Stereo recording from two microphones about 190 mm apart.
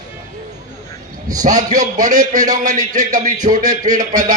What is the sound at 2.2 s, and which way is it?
Speech, 20° right (ahead or behind).